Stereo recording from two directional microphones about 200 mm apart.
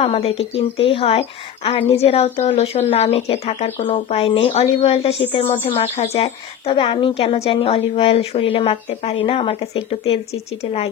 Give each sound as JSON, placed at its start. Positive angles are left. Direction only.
{"t": 0.0, "sound": "a woman's voice", "side_deg": 30}